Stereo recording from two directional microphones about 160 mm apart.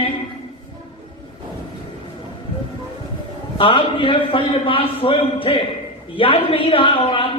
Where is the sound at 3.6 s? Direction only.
30° left (ahead or behind).